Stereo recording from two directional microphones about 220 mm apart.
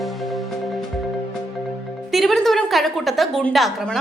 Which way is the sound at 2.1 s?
Centre (ahead or behind).